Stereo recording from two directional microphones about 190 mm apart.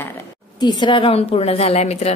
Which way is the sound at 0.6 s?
20° left (ahead or behind).